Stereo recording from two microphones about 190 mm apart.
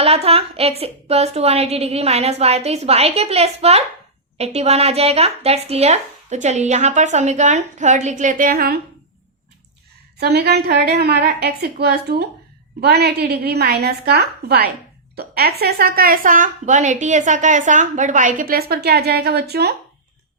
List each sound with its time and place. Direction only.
0.0 s speech: 30° right (ahead or behind); by 8.8 s 55° right (ahead or behind)
10.2 s a woman's voice: 60° right (ahead or behind)